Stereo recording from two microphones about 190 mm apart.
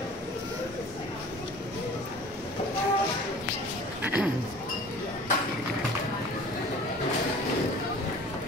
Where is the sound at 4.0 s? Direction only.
10° right (ahead or behind).